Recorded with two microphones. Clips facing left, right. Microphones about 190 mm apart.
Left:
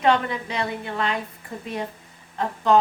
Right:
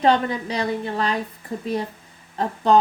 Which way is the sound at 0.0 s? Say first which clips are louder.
Right 2 dB; 35° right (ahead or behind).